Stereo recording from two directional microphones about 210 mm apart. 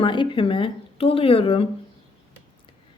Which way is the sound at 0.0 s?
25° left (ahead or behind).